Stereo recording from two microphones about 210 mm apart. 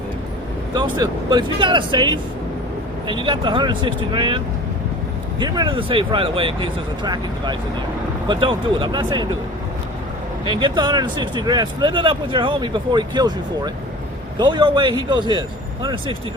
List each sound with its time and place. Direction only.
0.7 s speech: 20° right (ahead or behind)
5.4 s speech: 20° right (ahead or behind)
10.4 s speech: 20° right (ahead or behind)
14.3 s speech: 20° right (ahead or behind)